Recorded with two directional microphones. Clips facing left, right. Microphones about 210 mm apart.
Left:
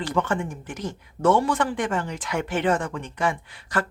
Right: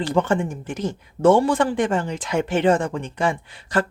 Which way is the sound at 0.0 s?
25° right (ahead or behind).